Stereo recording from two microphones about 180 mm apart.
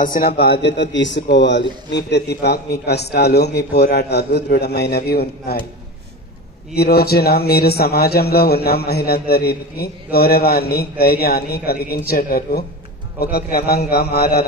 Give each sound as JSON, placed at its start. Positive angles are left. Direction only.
{"t": 0.0, "sound": "a man's voice", "side_deg": 55}
{"t": 6.7, "sound": "a man's voice", "side_deg": 60}